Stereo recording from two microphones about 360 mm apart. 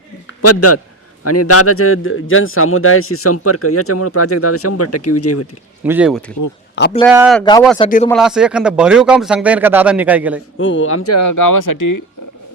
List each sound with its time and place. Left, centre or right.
0.4 s speech: left
5.8 s a man's voice: centre
6.8 s speech: left
7.1 s a man's voice: centre
7.8 s speech: left
8.0 s a man's voice: centre
10.6 s speech: left